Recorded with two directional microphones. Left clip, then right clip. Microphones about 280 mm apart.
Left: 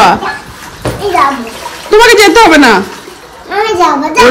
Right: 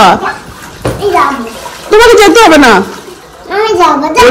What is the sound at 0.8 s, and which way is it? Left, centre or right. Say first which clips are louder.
Bathtub: right 2 dB; centre.